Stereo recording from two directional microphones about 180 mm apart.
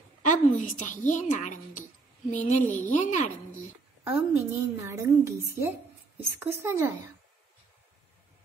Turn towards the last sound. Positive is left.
turn(degrees=-15)  # may be behind; listen again after turning